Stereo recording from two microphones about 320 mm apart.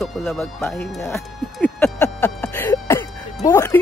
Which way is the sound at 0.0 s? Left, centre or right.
Centre.